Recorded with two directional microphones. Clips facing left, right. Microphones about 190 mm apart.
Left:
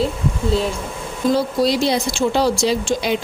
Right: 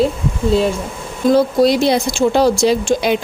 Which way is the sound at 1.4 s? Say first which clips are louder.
Right 7 dB; 55° right (ahead or behind).